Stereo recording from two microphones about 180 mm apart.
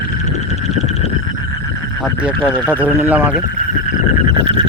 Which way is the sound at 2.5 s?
10° right (ahead or behind).